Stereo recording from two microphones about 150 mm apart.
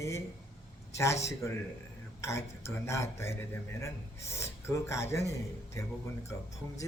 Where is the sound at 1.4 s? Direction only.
20° left (ahead or behind).